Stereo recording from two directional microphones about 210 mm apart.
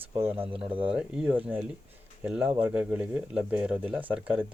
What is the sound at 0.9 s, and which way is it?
Speech, 5° right (ahead or behind).